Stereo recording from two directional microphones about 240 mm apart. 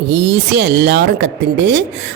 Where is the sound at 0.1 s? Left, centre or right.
Right.